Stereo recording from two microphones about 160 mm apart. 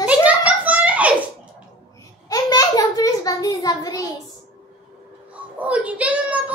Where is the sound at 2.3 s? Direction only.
20° left (ahead or behind).